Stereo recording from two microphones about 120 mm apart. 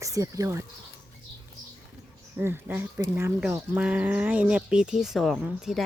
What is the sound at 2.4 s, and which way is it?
Speech, 20° right (ahead or behind).